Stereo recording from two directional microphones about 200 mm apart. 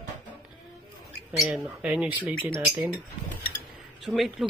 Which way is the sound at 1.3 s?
Centre (ahead or behind).